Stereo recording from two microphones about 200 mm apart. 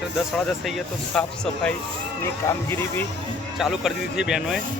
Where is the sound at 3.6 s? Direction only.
Centre (ahead or behind).